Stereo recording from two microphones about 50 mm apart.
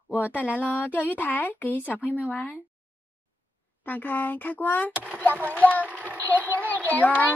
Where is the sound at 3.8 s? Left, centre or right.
Left.